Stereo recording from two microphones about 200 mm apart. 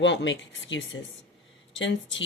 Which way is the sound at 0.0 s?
65° left (ahead or behind).